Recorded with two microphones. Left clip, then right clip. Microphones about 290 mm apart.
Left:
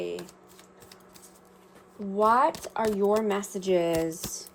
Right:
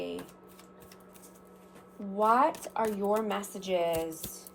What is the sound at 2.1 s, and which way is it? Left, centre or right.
Speech, left.